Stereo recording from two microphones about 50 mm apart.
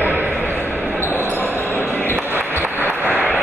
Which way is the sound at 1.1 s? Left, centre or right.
Right.